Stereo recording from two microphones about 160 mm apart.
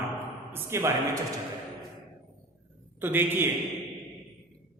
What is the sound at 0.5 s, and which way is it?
Speech, 15° right (ahead or behind).